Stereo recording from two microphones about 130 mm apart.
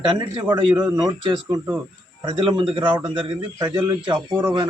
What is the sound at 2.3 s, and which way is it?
Speech, 40° right (ahead or behind).